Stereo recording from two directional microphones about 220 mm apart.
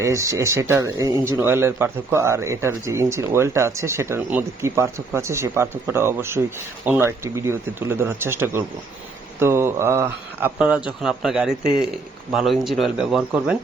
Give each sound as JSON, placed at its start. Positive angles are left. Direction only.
{"t": 0.0, "sound": "speech", "side_deg": -15}